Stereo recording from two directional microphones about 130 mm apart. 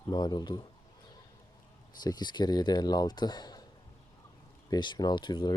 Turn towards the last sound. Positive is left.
turn(degrees=35)  # may be behind; listen again after turning